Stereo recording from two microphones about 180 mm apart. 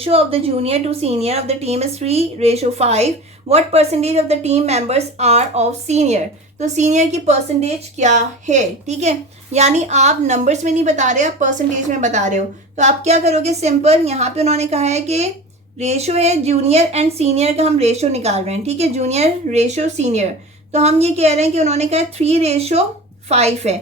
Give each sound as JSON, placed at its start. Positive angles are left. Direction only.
{"t": 0.0, "sound": "a woman's voice", "side_deg": -35}